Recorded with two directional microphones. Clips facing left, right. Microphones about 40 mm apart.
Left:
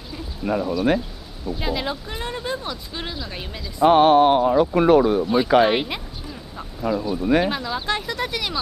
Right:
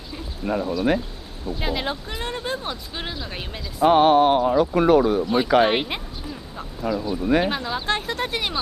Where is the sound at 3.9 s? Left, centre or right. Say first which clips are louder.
Left 1 dB; left.